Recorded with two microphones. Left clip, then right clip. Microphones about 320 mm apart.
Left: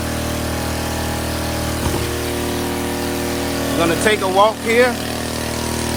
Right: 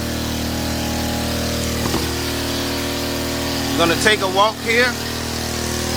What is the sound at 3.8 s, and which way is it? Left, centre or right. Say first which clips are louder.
Speech: right 1 dB; centre.